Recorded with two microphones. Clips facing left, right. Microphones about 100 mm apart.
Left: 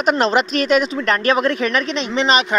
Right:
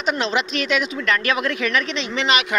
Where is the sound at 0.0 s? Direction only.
45° left (ahead or behind).